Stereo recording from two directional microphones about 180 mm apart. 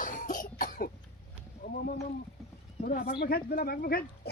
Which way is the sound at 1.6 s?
55° left (ahead or behind).